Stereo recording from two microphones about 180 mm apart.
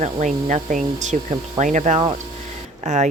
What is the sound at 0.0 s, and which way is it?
A woman's voice, 45° right (ahead or behind).